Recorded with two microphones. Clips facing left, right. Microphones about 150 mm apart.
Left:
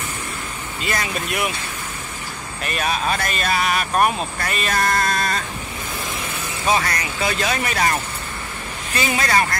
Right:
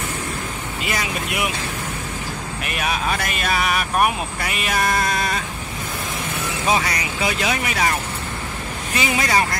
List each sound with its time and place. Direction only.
0.8 s speech: 10° right (ahead or behind)
2.6 s speech: 10° right (ahead or behind)
6.7 s speech: 10° right (ahead or behind)
8.9 s speech: 15° right (ahead or behind)